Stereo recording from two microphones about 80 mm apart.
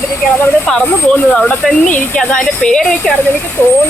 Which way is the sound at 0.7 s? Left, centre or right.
Centre.